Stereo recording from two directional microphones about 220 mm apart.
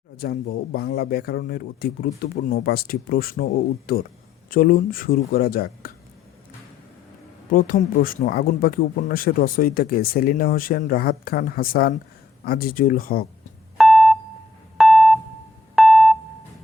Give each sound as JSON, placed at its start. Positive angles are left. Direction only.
{"t": 0.2, "sound": "a man's voice", "side_deg": 45}
{"t": 7.5, "sound": "speech", "side_deg": 40}
{"t": 13.7, "sound": "beep", "side_deg": 0}
{"t": 14.8, "sound": "a sound", "side_deg": 0}